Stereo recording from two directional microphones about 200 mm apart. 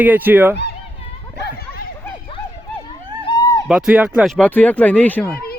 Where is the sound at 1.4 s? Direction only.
50° left (ahead or behind).